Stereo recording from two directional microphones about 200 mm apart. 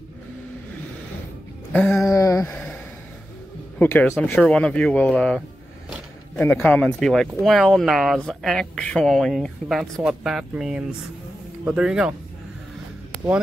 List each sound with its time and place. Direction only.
1.7 s speech: 5° left (ahead or behind)
2.0 s speech: 15° left (ahead or behind)
2.5 s a sound: 5° left (ahead or behind)
3.7 s speech: 10° left (ahead or behind)
6.4 s speech: 10° left (ahead or behind)